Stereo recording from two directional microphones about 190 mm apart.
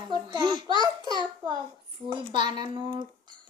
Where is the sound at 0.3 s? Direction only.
25° right (ahead or behind).